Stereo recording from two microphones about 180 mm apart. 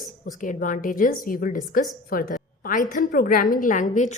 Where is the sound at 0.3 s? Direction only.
45° left (ahead or behind).